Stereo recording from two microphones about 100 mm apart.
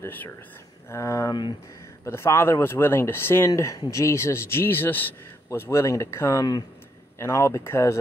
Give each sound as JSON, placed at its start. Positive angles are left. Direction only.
{"t": 0.0, "sound": "speech", "side_deg": 20}
{"t": 0.8, "sound": "speech", "side_deg": 30}